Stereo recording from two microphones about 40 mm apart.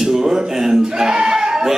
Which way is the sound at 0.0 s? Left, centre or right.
Centre.